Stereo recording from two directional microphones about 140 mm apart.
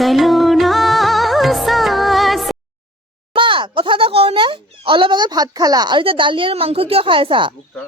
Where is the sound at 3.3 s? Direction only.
35° right (ahead or behind).